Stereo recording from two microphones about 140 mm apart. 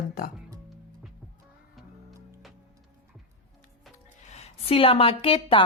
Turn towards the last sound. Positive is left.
turn(degrees=40)  # may be behind; listen again after turning